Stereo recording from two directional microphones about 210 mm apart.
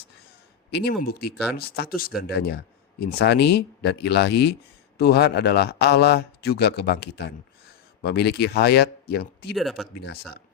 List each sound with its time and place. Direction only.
0.7 s a man's voice: 50° left (ahead or behind)
9.6 s speech: centre (ahead or behind)
10.0 s a man's voice: 50° left (ahead or behind)